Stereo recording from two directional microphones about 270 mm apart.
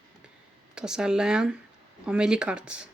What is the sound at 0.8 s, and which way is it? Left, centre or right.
Speech, centre.